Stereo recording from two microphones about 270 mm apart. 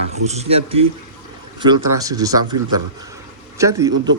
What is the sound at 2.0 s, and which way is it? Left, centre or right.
Speech, centre.